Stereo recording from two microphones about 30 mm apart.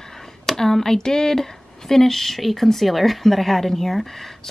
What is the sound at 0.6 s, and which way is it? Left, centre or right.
Speech, centre.